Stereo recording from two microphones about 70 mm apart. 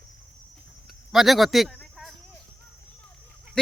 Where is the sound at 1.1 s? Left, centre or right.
Centre.